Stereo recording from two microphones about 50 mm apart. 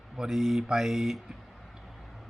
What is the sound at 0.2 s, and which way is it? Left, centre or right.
Speech, centre.